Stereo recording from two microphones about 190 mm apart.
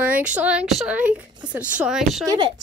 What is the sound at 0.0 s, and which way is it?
Speech, 5° right (ahead or behind).